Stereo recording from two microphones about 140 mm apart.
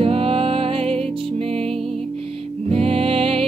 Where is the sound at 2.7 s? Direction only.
45° right (ahead or behind).